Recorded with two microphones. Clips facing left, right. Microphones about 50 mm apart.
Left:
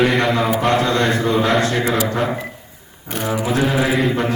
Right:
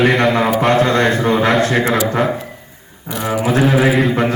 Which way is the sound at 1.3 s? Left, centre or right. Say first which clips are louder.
Right 3 dB; centre.